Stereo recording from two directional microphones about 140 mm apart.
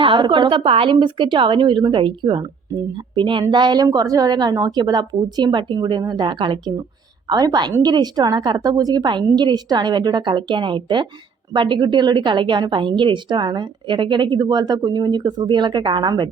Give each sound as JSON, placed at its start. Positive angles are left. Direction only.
{"t": 0.0, "sound": "a woman's voice", "side_deg": -35}